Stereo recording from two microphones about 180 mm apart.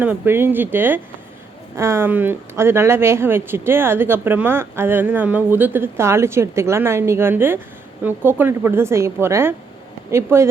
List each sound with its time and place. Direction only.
0.0 s speech: 10° right (ahead or behind)